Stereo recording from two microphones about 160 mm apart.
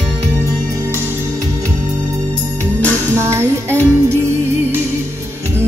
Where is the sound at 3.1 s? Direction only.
15° right (ahead or behind).